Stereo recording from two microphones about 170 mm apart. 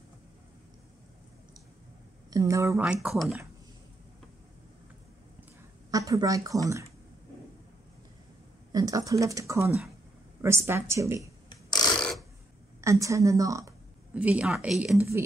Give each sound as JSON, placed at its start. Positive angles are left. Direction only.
{"t": 2.3, "sound": "a woman's voice", "side_deg": -20}
{"t": 2.8, "sound": "speech", "side_deg": -5}
{"t": 5.9, "sound": "speech", "side_deg": -20}
{"t": 8.7, "sound": "a woman's voice", "side_deg": -20}
{"t": 12.0, "sound": "a sound", "side_deg": 5}
{"t": 12.8, "sound": "speech", "side_deg": -15}
{"t": 14.1, "sound": "a woman's voice", "side_deg": -5}